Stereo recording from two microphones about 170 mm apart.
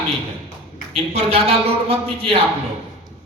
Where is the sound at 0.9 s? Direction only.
35° right (ahead or behind).